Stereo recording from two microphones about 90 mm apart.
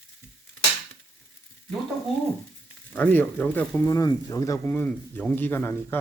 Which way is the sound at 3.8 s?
45° left (ahead or behind).